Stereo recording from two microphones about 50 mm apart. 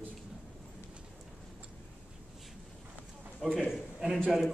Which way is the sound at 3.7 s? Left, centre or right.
Centre.